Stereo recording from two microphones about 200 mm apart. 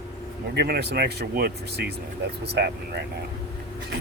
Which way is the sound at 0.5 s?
55° right (ahead or behind).